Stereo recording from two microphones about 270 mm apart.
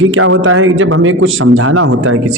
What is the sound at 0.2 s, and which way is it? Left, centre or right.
A man's voice, right.